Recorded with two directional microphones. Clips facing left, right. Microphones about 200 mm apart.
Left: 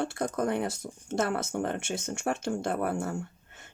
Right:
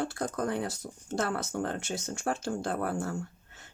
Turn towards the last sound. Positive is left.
turn(degrees=25)  # may be behind; listen again after turning